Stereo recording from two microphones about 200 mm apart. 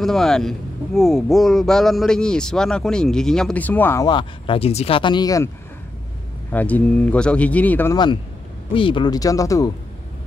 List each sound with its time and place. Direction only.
0.0 s a man's voice: centre (ahead or behind); by 5.5 s 20° left (ahead or behind)
6.5 s speech: 5° left (ahead or behind)
8.7 s speech: 25° left (ahead or behind)